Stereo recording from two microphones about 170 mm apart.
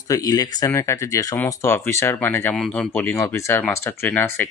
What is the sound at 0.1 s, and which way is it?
Speech, 20° left (ahead or behind).